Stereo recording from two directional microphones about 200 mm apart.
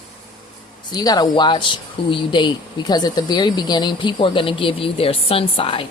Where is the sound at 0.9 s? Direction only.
20° left (ahead or behind).